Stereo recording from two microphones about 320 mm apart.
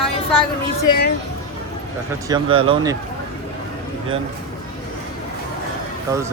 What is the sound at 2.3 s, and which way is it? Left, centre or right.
Speech, centre.